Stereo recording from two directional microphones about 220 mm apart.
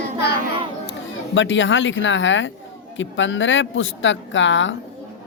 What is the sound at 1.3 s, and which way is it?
Speech, 60° left (ahead or behind).